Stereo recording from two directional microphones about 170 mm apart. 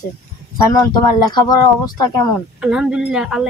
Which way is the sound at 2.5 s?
5° right (ahead or behind).